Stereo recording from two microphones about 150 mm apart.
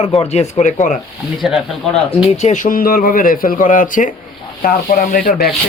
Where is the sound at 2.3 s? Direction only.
50° left (ahead or behind); by 5.3 s 65° left (ahead or behind).